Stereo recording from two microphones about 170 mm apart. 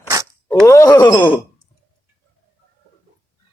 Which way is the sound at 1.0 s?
10° left (ahead or behind).